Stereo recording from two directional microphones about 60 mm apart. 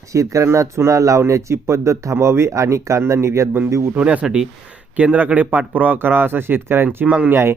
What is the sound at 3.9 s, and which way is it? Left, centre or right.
Speech, right.